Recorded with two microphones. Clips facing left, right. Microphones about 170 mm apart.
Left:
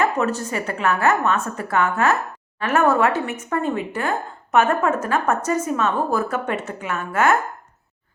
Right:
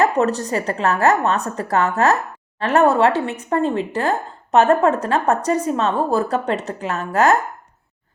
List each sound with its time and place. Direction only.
0.0 s a woman's voice: 35° right (ahead or behind)